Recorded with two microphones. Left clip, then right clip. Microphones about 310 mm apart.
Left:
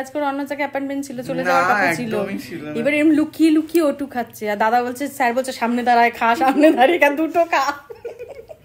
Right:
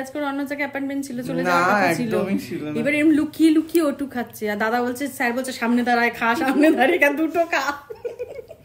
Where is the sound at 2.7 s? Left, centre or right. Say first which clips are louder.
Left 2 dB; centre.